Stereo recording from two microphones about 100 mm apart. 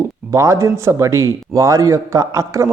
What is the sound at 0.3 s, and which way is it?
Speech, 30° right (ahead or behind).